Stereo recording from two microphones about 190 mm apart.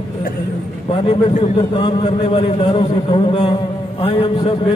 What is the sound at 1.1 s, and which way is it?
A man's voice, 30° left (ahead or behind).